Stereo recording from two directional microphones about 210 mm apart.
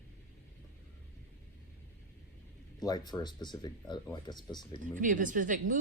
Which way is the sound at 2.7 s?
20° left (ahead or behind).